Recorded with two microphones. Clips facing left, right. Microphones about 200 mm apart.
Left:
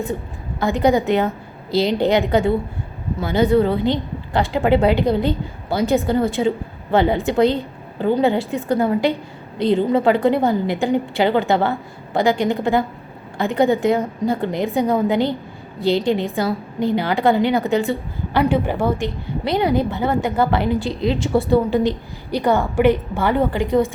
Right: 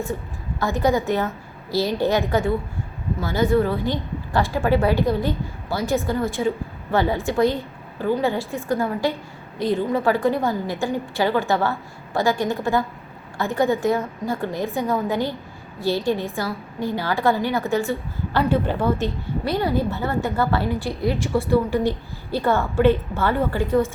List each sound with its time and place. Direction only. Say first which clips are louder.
0.6 s a woman's voice: left 4 dB; 15° left (ahead or behind)